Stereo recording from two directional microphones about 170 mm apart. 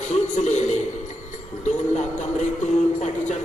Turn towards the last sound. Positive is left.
turn(degrees=45)  # may be behind; listen again after turning